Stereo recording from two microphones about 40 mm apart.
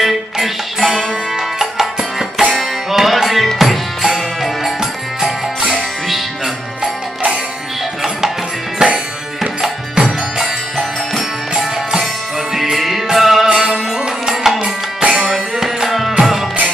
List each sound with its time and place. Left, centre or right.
0.0 s music: centre
6.0 s music: centre
8.9 s music: centre
13.5 s music: centre
15.0 s music: centre